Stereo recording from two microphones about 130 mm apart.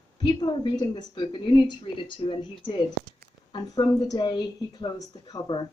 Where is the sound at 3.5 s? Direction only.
35° left (ahead or behind).